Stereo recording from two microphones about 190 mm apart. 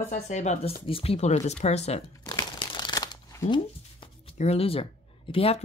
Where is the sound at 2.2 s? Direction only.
20° left (ahead or behind).